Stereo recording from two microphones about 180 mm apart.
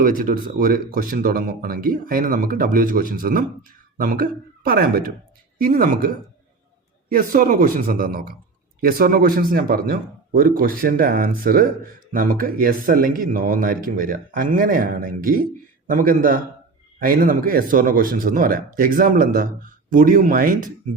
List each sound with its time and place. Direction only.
0.0 s speech: 50° right (ahead or behind)
7.1 s speech: 50° right (ahead or behind)